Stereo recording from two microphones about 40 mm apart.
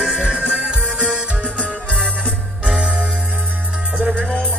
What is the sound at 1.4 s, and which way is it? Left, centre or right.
Music, left.